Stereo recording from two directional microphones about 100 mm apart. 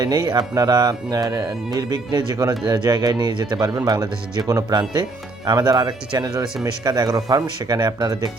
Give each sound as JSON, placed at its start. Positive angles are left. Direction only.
{"t": 0.0, "sound": "speech", "side_deg": -45}